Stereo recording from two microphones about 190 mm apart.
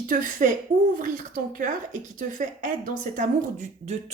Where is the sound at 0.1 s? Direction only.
45° right (ahead or behind).